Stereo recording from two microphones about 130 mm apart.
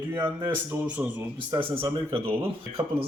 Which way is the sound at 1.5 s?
35° right (ahead or behind).